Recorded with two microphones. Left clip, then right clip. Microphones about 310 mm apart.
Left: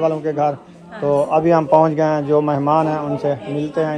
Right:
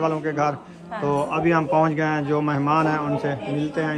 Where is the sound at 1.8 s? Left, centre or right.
Centre.